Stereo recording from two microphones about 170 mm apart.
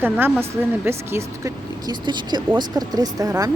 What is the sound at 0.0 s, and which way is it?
Speech, 10° right (ahead or behind).